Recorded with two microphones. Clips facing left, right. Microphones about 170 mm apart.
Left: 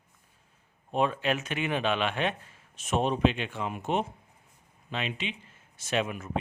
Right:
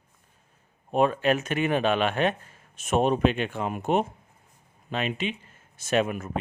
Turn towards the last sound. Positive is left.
turn(degrees=-50)  # may be behind; listen again after turning